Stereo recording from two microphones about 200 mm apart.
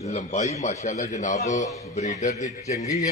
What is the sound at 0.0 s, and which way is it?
A man's voice, 35° left (ahead or behind).